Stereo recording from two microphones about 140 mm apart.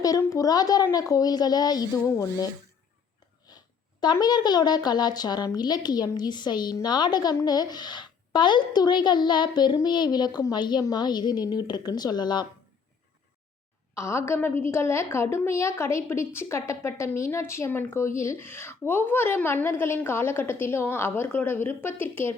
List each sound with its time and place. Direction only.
0.0 s a woman's voice: 25° left (ahead or behind)
4.0 s a woman's voice: 30° left (ahead or behind)
13.9 s a woman's voice: 20° left (ahead or behind)